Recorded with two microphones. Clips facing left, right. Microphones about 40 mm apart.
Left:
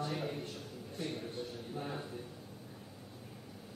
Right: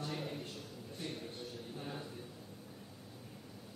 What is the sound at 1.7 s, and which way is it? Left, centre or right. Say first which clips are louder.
Speech: left 5 dB; centre.